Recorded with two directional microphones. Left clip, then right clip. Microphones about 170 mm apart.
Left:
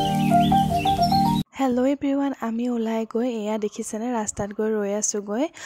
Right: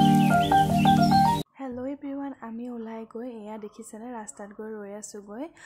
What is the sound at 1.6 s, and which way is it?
Speech, 45° left (ahead or behind).